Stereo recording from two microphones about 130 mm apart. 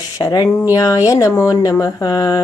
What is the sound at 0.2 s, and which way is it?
Speech, 30° left (ahead or behind).